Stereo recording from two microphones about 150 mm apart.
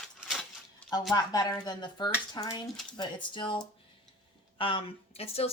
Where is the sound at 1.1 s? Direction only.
25° left (ahead or behind); by 5.5 s 40° left (ahead or behind).